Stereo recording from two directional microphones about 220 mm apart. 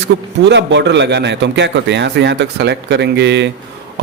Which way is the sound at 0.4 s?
55° right (ahead or behind).